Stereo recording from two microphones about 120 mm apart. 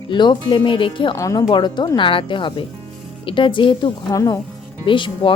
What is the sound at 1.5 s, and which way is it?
Speech, 40° left (ahead or behind).